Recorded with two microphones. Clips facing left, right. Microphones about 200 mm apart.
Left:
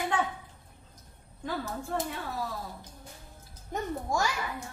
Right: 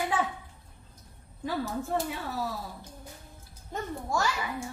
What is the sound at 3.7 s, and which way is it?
Speech, 15° left (ahead or behind).